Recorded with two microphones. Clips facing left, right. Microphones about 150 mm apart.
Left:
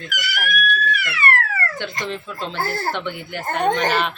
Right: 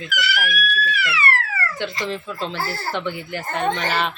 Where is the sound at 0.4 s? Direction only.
50° left (ahead or behind).